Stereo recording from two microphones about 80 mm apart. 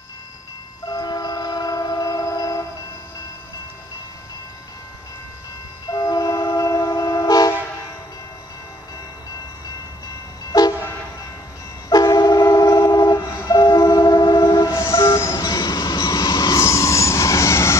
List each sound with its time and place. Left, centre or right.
0.8 s train: left
5.9 s train: left
11.9 s train: left